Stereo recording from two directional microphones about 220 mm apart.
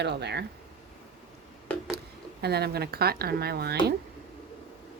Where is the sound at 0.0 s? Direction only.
50° right (ahead or behind).